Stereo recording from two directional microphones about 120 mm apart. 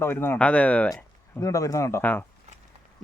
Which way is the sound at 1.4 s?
25° left (ahead or behind).